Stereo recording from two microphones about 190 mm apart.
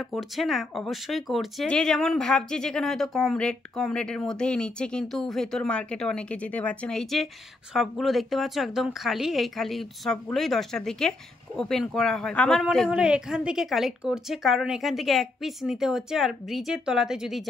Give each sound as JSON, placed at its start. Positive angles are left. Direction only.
{"t": 0.0, "sound": "speech", "side_deg": 0}